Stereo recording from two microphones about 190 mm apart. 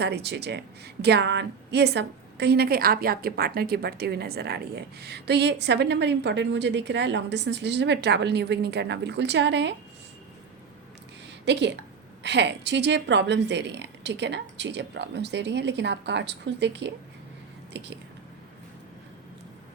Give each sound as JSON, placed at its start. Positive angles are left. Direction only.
{"t": 0.0, "sound": "a woman's voice", "side_deg": -60}
{"t": 11.5, "sound": "a woman's voice", "side_deg": -65}